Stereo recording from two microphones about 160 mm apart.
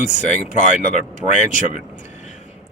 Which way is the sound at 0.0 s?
50° left (ahead or behind).